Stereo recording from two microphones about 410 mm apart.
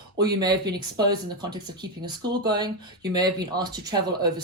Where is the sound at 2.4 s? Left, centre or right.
Centre.